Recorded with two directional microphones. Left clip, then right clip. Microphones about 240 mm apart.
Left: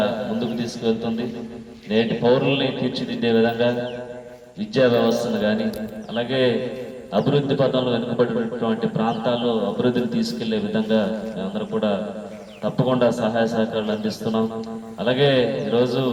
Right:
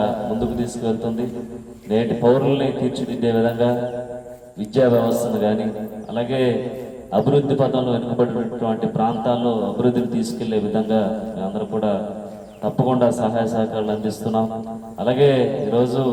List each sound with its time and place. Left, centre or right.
0.0 s a man's voice: right